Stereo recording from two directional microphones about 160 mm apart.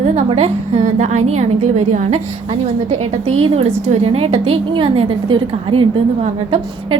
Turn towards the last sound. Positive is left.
turn(degrees=-35)  # may be behind; listen again after turning